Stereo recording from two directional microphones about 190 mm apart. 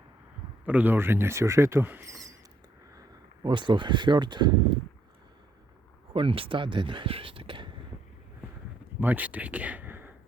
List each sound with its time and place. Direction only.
0.6 s speech: 10° right (ahead or behind)
3.4 s speech: 25° right (ahead or behind)
6.1 s speech: 30° right (ahead or behind)
9.0 s speech: 10° right (ahead or behind)